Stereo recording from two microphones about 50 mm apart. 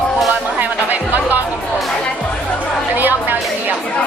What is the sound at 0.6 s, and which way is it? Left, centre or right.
Music, right.